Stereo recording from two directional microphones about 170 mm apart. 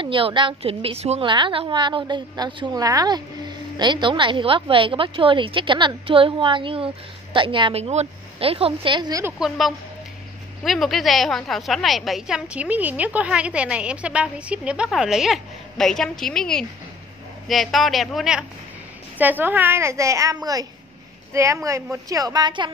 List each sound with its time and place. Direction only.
0.0 s a woman's voice: 30° right (ahead or behind)
9.4 s a woman's voice: centre (ahead or behind); by 22.7 s 25° right (ahead or behind)